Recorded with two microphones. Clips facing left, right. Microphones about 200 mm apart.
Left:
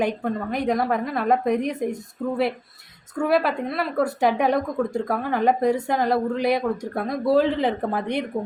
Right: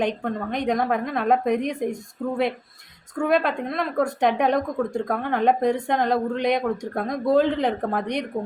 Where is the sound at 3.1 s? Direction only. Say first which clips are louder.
Even; 5° left (ahead or behind).